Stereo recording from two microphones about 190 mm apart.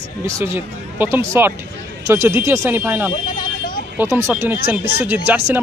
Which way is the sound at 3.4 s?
45° left (ahead or behind).